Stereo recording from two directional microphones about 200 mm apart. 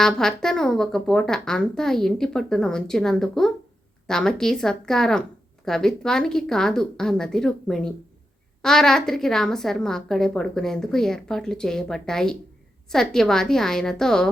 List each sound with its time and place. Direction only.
0.0 s a woman's voice: 5° left (ahead or behind)